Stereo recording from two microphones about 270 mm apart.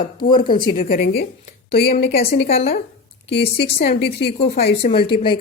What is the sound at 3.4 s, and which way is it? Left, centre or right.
Speech, left.